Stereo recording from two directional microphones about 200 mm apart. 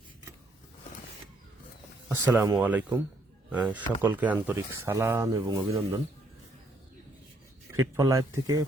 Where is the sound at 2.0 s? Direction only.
15° right (ahead or behind).